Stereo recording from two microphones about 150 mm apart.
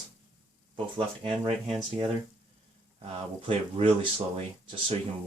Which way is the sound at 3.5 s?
35° right (ahead or behind).